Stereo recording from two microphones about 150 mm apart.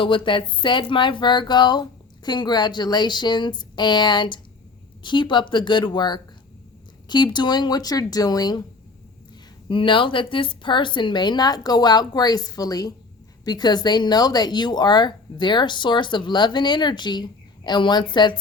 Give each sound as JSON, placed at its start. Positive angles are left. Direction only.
{"t": 0.0, "sound": "speech", "side_deg": 35}
{"t": 9.6, "sound": "speech", "side_deg": 35}